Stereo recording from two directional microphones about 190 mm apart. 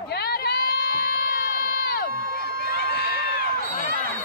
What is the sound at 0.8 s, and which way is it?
Crowd, 50° left (ahead or behind).